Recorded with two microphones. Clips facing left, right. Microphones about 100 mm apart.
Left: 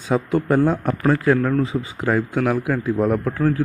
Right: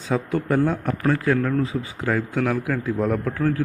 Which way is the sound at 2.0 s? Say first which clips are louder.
Left 3 dB; 15° left (ahead or behind).